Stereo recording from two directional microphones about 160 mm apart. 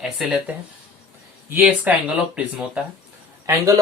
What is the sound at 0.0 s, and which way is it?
Speech, 5° right (ahead or behind).